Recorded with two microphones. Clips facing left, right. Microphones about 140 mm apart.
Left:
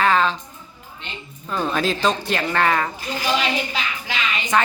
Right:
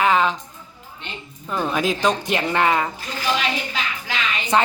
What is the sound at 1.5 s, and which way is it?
Speech, 10° right (ahead or behind).